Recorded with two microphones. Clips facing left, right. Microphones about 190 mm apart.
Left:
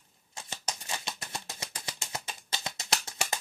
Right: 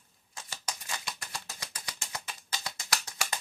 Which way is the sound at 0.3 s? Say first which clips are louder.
Left 2 dB; 25° left (ahead or behind).